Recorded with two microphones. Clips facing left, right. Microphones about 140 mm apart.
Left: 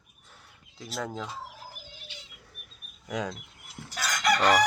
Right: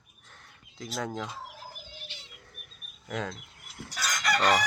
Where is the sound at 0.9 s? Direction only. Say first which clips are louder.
Even; 5° left (ahead or behind).